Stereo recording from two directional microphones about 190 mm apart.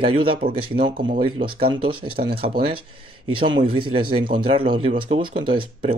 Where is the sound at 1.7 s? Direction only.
25° right (ahead or behind).